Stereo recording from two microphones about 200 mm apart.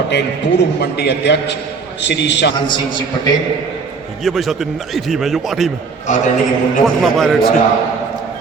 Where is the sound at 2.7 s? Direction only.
20° left (ahead or behind).